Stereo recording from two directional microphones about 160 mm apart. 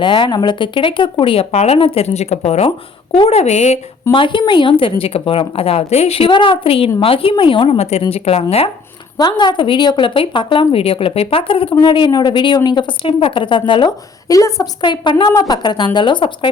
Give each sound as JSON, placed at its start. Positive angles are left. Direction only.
{"t": 0.0, "sound": "a woman's voice", "side_deg": 30}
{"t": 4.1, "sound": "a woman's voice", "side_deg": 30}
{"t": 9.1, "sound": "a woman's voice", "side_deg": 25}